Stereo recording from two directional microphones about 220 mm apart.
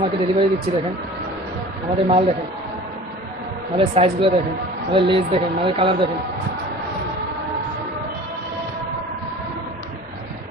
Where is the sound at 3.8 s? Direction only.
25° right (ahead or behind).